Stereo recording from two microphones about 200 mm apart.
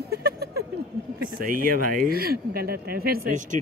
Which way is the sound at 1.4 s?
45° right (ahead or behind).